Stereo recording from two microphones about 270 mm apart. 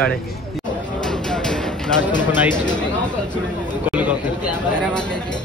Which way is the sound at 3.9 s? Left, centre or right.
Centre.